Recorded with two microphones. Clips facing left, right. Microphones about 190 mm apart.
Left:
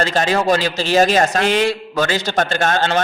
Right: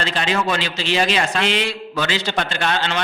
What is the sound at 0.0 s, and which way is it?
A man's voice, 45° left (ahead or behind).